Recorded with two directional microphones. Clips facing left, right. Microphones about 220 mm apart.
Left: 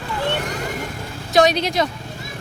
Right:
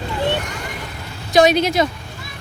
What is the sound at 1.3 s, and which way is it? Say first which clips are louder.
Speech: right 3 dB; 5° right (ahead or behind).